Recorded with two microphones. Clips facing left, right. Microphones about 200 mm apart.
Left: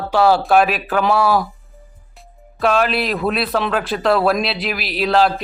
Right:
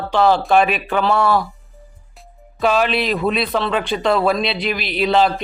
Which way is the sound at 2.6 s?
Centre (ahead or behind).